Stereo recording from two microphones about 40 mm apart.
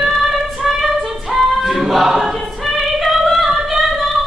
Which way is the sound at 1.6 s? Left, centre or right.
Centre.